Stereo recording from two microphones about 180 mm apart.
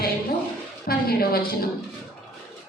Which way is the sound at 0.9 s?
60° left (ahead or behind).